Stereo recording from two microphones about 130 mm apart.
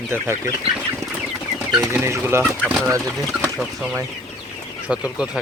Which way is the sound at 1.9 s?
20° right (ahead or behind).